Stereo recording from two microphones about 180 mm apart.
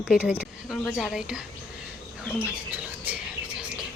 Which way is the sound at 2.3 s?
5° right (ahead or behind).